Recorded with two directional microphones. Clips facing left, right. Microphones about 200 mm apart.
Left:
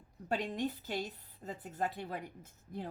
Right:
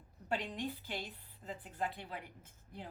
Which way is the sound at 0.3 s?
40° left (ahead or behind).